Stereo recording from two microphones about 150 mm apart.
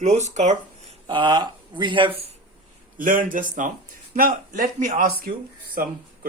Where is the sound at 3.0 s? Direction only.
65° right (ahead or behind).